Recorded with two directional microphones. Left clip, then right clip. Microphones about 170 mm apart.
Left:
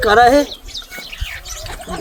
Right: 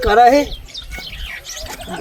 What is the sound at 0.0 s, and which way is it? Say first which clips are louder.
Speech: even; 5° left (ahead or behind).